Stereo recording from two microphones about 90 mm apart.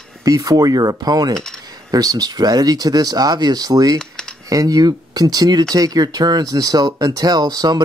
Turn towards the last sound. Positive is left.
turn(degrees=-45)  # may be behind; listen again after turning